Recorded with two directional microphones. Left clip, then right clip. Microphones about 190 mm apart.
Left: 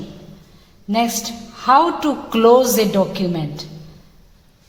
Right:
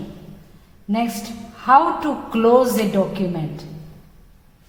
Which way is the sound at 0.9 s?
40° left (ahead or behind).